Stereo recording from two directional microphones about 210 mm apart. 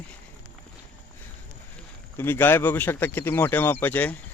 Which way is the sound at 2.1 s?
10° left (ahead or behind).